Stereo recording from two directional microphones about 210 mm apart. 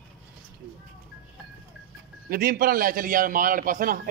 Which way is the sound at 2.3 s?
45° right (ahead or behind).